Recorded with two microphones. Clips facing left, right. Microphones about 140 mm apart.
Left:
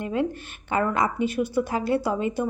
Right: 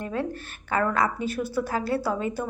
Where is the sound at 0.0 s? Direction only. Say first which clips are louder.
Left 3 dB; 15° left (ahead or behind).